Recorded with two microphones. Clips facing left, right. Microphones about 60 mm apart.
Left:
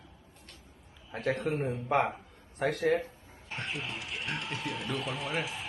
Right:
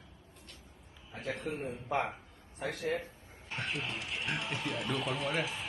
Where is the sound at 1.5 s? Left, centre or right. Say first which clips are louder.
Left 6 dB; left.